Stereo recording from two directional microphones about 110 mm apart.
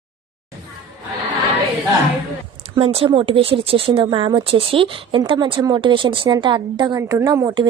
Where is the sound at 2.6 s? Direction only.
70° right (ahead or behind); by 4.0 s 55° right (ahead or behind).